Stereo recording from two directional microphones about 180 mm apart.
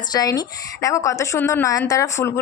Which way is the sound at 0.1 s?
20° left (ahead or behind).